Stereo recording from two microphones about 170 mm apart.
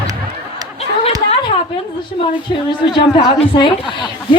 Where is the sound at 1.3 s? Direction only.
35° left (ahead or behind).